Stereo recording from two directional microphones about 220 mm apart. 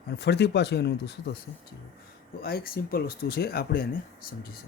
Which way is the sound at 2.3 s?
45° left (ahead or behind).